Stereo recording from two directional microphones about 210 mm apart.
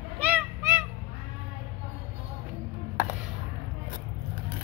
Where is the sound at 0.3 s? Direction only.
10° right (ahead or behind).